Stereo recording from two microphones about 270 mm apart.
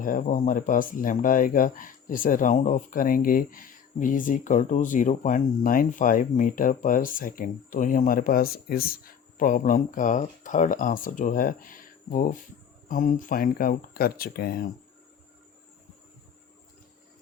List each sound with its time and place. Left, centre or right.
0.0 s speech: left